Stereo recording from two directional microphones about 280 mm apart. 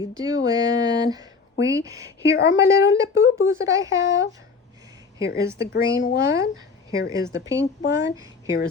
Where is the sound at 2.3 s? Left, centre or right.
Left.